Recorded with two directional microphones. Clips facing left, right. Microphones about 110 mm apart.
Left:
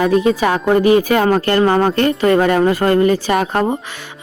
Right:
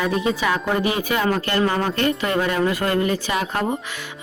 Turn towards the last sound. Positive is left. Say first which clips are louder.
# left 7 dB
turn(degrees=45)  # may be behind; listen again after turning